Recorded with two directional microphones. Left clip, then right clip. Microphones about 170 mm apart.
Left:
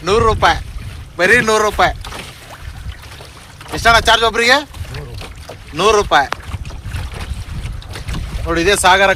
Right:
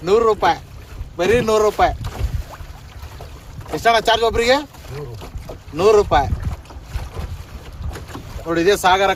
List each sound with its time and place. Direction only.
0.0 s speech: 5° left (ahead or behind)
3.8 s speech: centre (ahead or behind)
5.7 s speech: centre (ahead or behind)
8.4 s speech: 15° left (ahead or behind)
8.9 s speech: 35° left (ahead or behind)